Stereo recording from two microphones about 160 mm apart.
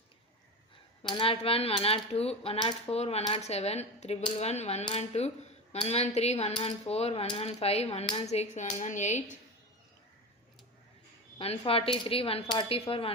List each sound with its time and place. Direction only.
1.0 s speech: 30° left (ahead or behind); by 9.2 s 50° left (ahead or behind)
11.3 s speech: 35° left (ahead or behind)